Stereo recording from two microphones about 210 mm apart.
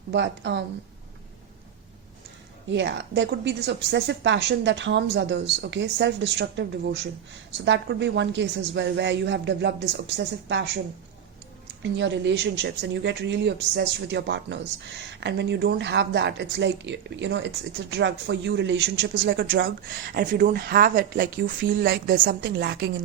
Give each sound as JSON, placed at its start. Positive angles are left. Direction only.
{"t": 0.1, "sound": "a woman's voice", "side_deg": -55}
{"t": 2.6, "sound": "a woman's voice", "side_deg": -55}
{"t": 11.8, "sound": "a woman's voice", "side_deg": -55}
{"t": 20.1, "sound": "speech", "side_deg": -50}